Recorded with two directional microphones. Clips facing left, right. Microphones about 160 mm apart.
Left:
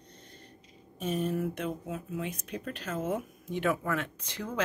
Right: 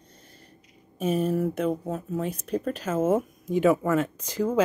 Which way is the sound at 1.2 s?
40° right (ahead or behind).